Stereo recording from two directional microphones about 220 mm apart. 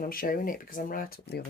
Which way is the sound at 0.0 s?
40° left (ahead or behind).